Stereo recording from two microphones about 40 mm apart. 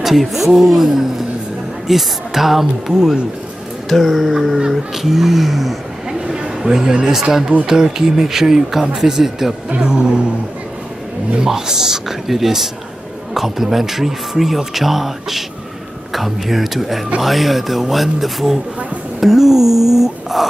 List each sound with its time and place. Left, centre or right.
0.0 s speech: centre
3.9 s speech: centre
6.2 s a sound: centre
7.6 s speech: centre
9.8 s speech: right
11.3 s speech: centre